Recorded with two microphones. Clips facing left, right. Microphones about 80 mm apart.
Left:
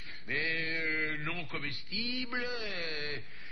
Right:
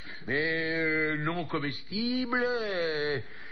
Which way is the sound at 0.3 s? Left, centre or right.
Right.